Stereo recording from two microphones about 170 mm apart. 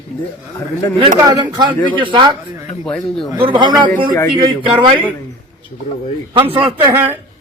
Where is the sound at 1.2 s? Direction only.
20° right (ahead or behind).